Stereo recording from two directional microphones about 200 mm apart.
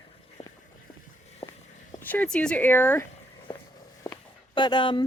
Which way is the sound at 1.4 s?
30° left (ahead or behind).